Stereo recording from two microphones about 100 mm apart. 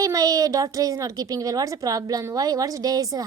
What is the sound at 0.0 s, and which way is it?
A woman's voice, 35° right (ahead or behind).